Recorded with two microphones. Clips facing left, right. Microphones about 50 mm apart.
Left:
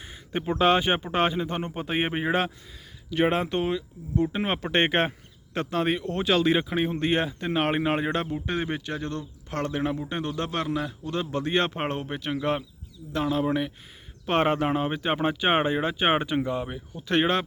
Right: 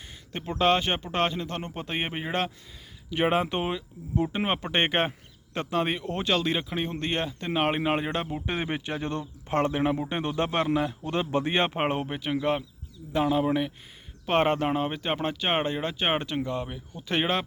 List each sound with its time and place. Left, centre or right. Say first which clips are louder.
0.0 s a sound: left 6 dB; centre
0.6 s speech: left 2 dB; centre
3.1 s speech: left 1 dB; centre
8.3 s speech: left 1 dB; centre